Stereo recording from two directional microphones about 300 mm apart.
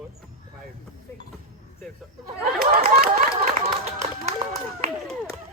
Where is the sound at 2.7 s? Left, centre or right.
Right.